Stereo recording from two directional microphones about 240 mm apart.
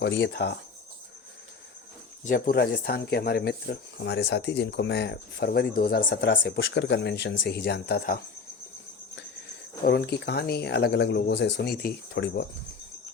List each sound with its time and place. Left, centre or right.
0.0 s speech: left
2.2 s speech: left
9.8 s speech: left